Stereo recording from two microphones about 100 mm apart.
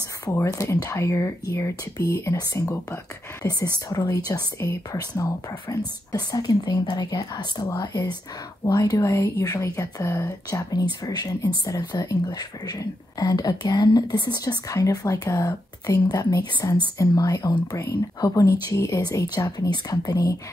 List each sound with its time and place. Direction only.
0.2 s speech: 30° left (ahead or behind)
3.4 s speech: 40° left (ahead or behind)